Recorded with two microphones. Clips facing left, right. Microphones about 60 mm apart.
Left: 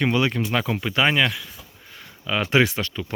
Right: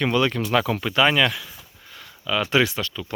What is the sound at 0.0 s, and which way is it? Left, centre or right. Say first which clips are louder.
Speech: even; centre.